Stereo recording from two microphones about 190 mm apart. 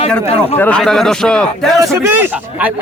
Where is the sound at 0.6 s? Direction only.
5° left (ahead or behind).